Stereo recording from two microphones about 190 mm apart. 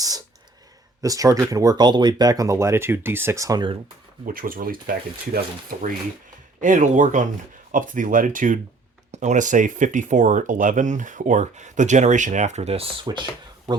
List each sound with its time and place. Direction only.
1.0 s speech: 20° right (ahead or behind)
4.3 s speech: 45° right (ahead or behind)